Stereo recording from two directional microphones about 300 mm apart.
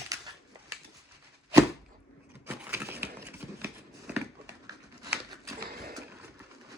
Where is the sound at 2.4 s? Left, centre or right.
Centre.